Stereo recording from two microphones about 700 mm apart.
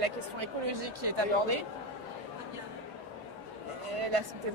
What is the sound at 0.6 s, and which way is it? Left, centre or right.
Speech, right.